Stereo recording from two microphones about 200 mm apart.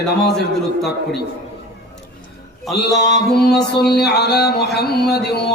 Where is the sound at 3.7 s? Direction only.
55° left (ahead or behind).